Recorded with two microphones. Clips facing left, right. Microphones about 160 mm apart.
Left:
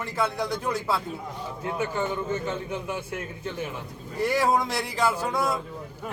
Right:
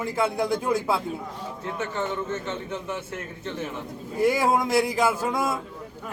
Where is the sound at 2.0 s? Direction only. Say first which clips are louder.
Left 1 dB; 10° left (ahead or behind).